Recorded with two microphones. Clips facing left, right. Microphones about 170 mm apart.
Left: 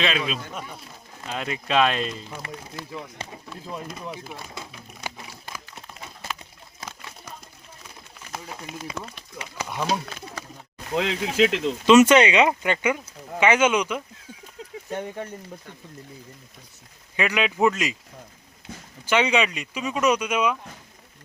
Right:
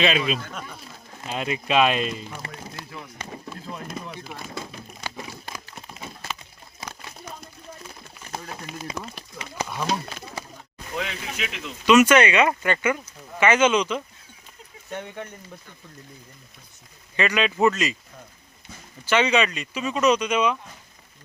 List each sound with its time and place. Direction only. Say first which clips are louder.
0.0 s speech: right 3 dB; 5° right (ahead or behind)
0.4 s speech: left 1 dB; 15° left (ahead or behind)
1.2 s speech: right 2 dB; 10° right (ahead or behind)
2.4 s speech: left 2 dB; 30° right (ahead or behind)
10.9 s speech: left 8 dB; 90° left
11.6 s speech: left 1 dB; 25° left (ahead or behind); by 14.0 s 10° left (ahead or behind)
14.8 s speech: left 3 dB; 35° left (ahead or behind)
17.2 s speech: right 1 dB; 10° left (ahead or behind)
19.0 s speech: right 1 dB; 15° left (ahead or behind)